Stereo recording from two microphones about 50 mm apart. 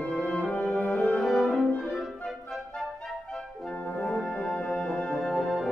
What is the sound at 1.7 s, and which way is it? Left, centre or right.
Music, left.